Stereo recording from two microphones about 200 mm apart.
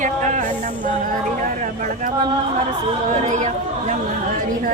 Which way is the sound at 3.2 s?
35° right (ahead or behind).